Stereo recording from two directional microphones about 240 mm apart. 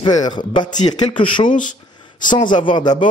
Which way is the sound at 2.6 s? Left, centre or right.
Centre.